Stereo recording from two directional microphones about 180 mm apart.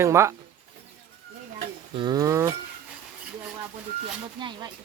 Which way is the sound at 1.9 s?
25° right (ahead or behind).